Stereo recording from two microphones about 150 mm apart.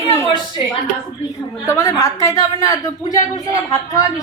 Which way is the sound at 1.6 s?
20° left (ahead or behind).